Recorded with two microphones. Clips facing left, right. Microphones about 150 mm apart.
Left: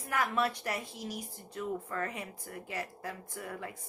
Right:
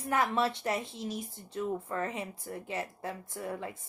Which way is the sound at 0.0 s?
30° right (ahead or behind).